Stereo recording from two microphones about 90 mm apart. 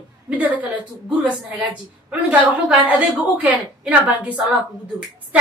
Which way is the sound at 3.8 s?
15° right (ahead or behind).